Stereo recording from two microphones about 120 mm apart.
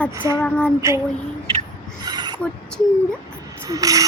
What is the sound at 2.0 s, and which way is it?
Filing, 35° right (ahead or behind).